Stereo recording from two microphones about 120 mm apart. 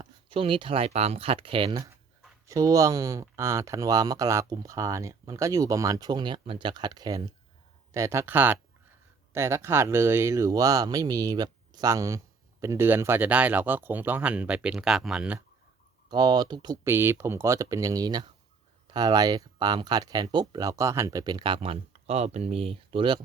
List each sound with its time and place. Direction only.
0.3 s speech: 45° right (ahead or behind)
2.5 s speech: 30° right (ahead or behind); by 15.4 s 5° right (ahead or behind)
16.0 s speech: 35° right (ahead or behind)
16.7 s speech: 20° right (ahead or behind); by 23.2 s 45° right (ahead or behind)